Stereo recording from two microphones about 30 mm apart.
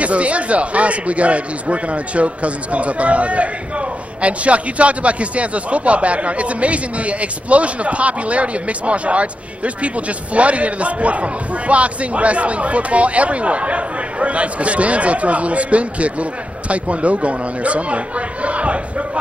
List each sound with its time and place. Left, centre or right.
0.0 s speech: right